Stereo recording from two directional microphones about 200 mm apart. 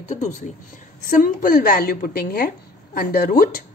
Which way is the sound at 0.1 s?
35° left (ahead or behind).